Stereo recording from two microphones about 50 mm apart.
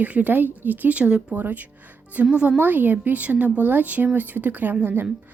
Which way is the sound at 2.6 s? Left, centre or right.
Right.